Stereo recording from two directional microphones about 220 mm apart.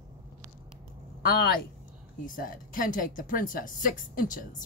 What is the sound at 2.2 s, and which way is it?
Speech, 40° left (ahead or behind).